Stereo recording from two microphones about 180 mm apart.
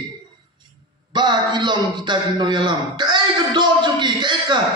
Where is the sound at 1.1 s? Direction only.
25° right (ahead or behind).